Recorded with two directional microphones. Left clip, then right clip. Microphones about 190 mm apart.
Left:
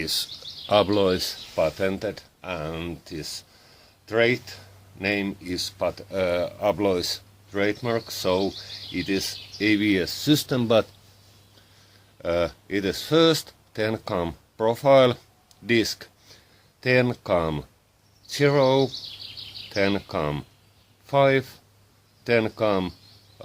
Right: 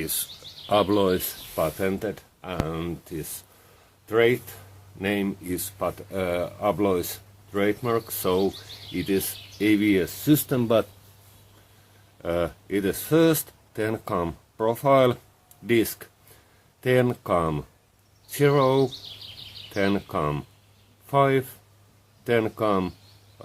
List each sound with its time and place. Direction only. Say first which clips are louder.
0.0 s speech: left 5 dB; 40° left (ahead or behind)
12.2 s speech: left 2 dB; 35° left (ahead or behind)